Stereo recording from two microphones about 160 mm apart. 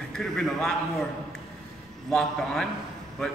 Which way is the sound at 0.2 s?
Centre (ahead or behind).